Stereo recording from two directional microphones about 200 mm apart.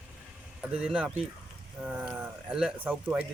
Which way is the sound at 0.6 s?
5° right (ahead or behind).